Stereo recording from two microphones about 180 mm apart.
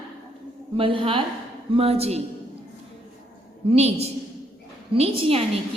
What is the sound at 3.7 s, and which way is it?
A woman's voice, 35° right (ahead or behind).